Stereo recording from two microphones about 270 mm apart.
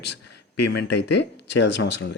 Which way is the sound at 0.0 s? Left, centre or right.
Left.